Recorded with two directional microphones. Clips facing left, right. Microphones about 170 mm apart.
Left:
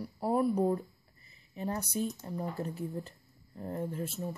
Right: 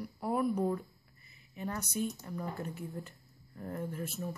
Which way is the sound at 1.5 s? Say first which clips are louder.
Left 3 dB; 30° left (ahead or behind).